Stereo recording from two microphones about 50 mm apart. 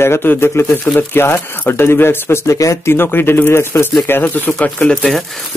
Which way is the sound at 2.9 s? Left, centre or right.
Left.